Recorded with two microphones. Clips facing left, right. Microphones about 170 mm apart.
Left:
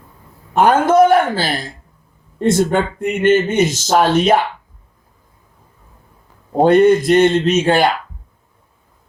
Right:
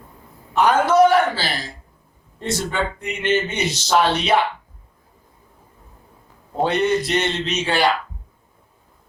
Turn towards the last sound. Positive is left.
turn(degrees=50)  # may be behind; listen again after turning